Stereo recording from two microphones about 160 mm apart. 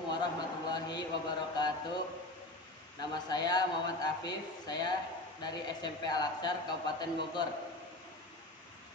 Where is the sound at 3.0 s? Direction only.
25° left (ahead or behind).